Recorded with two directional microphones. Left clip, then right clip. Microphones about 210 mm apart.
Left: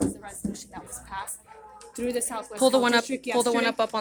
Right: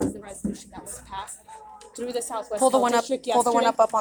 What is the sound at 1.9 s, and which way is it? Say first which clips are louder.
Speech: even; 30° left (ahead or behind).